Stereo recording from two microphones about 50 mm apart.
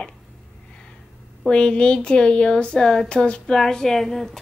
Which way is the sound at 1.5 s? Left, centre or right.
Centre.